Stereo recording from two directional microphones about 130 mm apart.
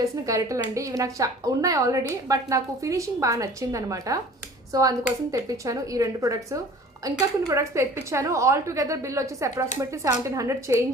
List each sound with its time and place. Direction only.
0.3 s a woman's voice: 25° right (ahead or behind)